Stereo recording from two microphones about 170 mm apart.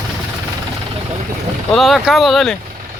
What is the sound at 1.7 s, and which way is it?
Speech, centre (ahead or behind).